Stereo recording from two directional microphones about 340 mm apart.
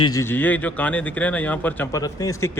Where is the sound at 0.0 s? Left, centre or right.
Centre.